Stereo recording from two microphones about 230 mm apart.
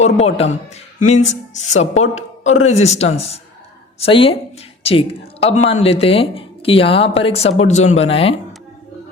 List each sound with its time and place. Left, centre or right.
0.0 s a woman's voice: left